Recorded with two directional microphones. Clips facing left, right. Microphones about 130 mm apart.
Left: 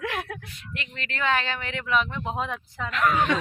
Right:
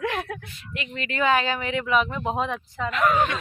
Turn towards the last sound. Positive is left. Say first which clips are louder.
# right 2 dB
turn(degrees=-5)  # may be behind; listen again after turning